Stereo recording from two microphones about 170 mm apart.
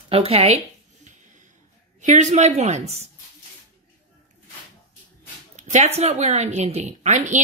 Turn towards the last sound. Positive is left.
turn(degrees=-45)  # may be behind; listen again after turning